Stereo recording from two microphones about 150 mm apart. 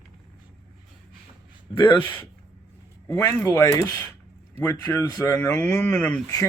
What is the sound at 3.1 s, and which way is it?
Speech, 20° left (ahead or behind).